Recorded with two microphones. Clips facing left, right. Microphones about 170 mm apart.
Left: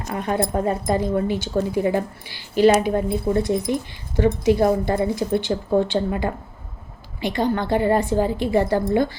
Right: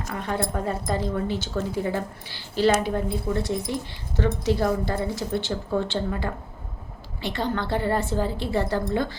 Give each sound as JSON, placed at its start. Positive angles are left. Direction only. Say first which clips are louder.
{"t": 0.0, "sound": "a woman's voice", "louder": "left 5 dB", "side_deg": 15}